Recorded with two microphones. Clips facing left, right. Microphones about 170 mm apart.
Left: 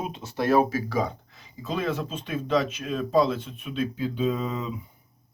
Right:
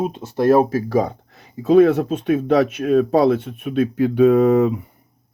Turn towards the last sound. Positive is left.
turn(degrees=-70)  # may be behind; listen again after turning